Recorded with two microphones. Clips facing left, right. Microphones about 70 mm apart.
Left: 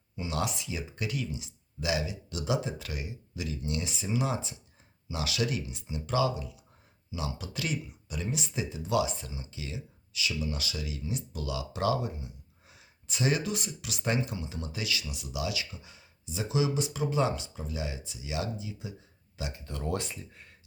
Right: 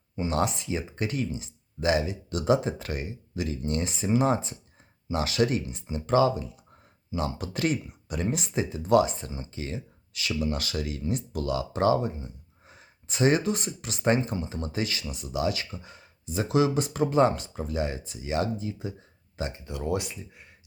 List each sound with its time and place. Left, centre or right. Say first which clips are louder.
0.2 s speech: right 6 dB; right
19.6 s speech: right 3 dB; centre